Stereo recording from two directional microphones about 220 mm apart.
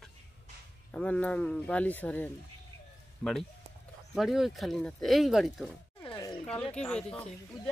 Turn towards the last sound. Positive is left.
turn(degrees=5)  # may be behind; listen again after turning